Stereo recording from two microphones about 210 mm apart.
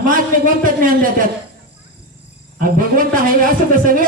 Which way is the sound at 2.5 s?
40° right (ahead or behind).